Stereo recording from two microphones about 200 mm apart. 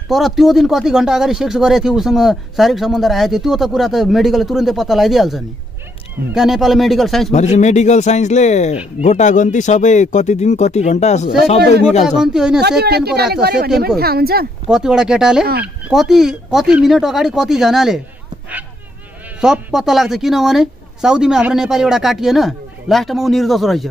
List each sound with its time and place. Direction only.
0.1 s speech: centre (ahead or behind)
7.3 s speech: 35° left (ahead or behind)
12.2 s speech: 5° right (ahead or behind)
12.8 s speech: 55° right (ahead or behind)
14.7 s speech: 5° right (ahead or behind)
19.4 s speech: 5° right (ahead or behind)